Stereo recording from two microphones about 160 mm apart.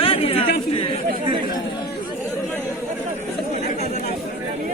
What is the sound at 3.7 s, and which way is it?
Chatter, 45° left (ahead or behind).